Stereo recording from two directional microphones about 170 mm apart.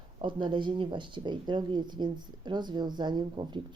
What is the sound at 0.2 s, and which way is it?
Speech, 30° right (ahead or behind).